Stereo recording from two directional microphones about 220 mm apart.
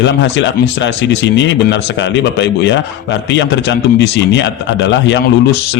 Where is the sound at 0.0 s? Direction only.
55° left (ahead or behind).